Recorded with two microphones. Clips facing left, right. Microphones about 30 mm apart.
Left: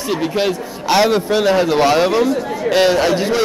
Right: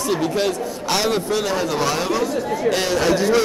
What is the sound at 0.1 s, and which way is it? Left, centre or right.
A man's voice, left.